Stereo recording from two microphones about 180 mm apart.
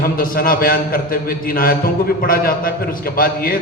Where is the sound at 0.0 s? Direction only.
55° left (ahead or behind).